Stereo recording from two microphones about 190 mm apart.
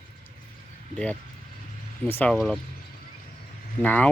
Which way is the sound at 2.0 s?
10° left (ahead or behind).